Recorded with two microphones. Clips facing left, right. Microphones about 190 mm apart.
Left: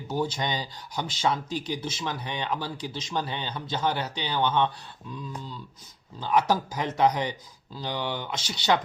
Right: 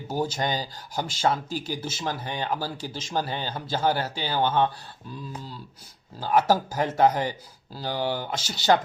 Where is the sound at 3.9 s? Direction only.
5° right (ahead or behind).